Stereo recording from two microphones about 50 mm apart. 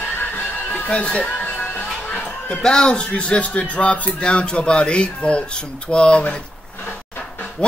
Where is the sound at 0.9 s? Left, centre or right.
Left.